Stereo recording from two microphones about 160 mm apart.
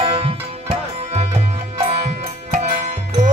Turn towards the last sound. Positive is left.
turn(degrees=-50)  # may be behind; listen again after turning